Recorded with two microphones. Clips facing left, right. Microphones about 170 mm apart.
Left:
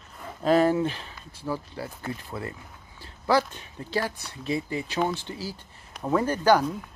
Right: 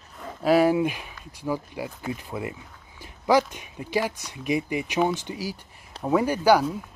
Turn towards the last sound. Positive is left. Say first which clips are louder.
# right 2 dB
turn(degrees=-10)  # may be behind; listen again after turning